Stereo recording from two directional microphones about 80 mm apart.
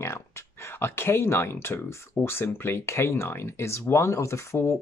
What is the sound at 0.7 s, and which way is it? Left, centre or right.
Speech, left.